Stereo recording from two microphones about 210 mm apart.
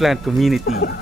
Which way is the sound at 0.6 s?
45° left (ahead or behind).